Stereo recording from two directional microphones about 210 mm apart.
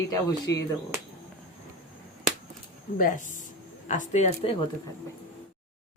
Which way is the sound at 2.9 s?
40° left (ahead or behind).